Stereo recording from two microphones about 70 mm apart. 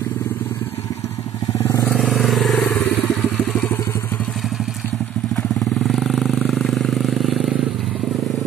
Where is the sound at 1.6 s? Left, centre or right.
Left.